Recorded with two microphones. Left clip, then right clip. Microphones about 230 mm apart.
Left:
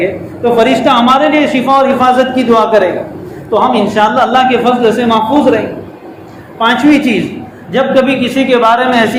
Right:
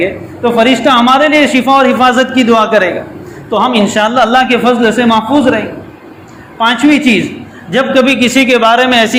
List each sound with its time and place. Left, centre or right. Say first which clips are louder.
0.0 s a man's voice: even; right